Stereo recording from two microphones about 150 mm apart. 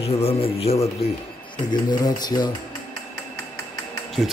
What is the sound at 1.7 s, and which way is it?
Speech, 25° left (ahead or behind).